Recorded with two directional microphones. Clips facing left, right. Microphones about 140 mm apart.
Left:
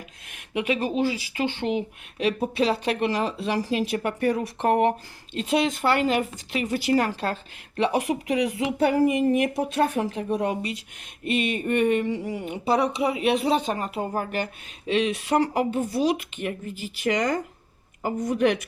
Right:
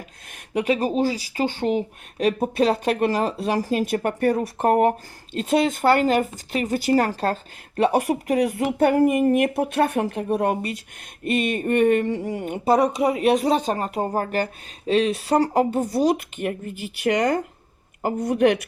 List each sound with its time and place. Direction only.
0.3 s speech: 40° right (ahead or behind); by 18.6 s 60° right (ahead or behind)